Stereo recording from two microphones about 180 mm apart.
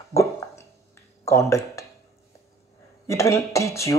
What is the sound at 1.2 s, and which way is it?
Speech, 15° left (ahead or behind).